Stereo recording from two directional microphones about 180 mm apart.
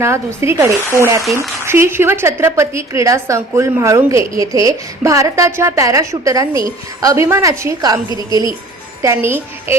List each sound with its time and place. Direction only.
0.0 s a woman's voice: 15° right (ahead or behind)
9.0 s a woman's voice: 15° right (ahead or behind)